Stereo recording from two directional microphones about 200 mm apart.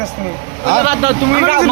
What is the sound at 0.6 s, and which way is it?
Speech, 40° right (ahead or behind).